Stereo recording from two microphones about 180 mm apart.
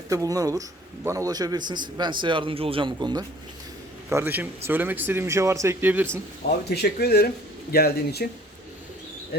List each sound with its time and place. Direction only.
0.1 s a man's voice: 20° right (ahead or behind)
4.1 s speech: 10° right (ahead or behind)
6.7 s speech: 65° left (ahead or behind)